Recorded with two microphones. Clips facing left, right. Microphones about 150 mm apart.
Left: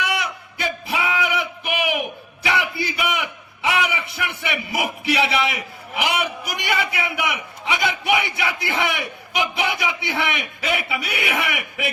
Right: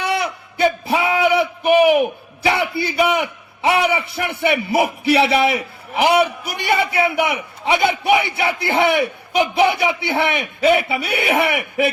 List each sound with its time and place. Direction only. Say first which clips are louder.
0.0 s a man's voice: right 4 dB; 30° right (ahead or behind)